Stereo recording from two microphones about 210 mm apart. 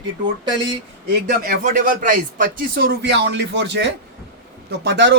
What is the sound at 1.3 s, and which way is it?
Speech, 45° right (ahead or behind).